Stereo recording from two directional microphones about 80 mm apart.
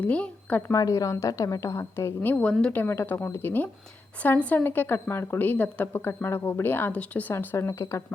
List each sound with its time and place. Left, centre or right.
0.0 s a woman's voice: centre
0.7 s a woman's voice: left
2.3 s a woman's voice: centre
2.7 s a woman's voice: left
7.3 s a woman's voice: left